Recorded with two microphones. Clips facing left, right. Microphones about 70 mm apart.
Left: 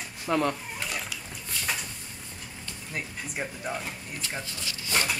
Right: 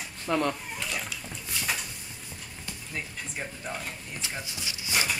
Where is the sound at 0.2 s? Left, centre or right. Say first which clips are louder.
Left 1 dB; centre.